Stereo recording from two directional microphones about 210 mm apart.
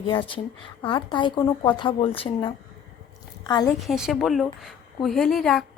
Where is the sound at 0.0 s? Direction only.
25° left (ahead or behind).